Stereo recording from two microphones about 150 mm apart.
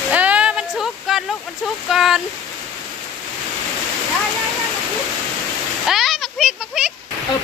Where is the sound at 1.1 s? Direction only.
Centre (ahead or behind).